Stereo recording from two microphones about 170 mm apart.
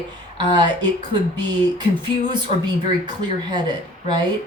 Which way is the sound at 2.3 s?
25° right (ahead or behind).